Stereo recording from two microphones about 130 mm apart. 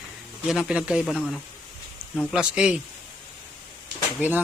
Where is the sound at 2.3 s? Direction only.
5° right (ahead or behind).